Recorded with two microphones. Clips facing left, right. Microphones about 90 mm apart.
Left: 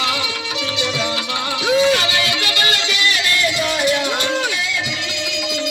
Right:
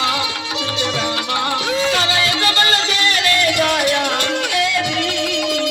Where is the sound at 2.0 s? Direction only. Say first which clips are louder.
Right 2 dB; 35° right (ahead or behind).